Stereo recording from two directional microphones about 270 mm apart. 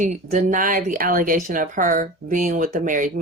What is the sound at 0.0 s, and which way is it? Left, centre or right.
Speech, right.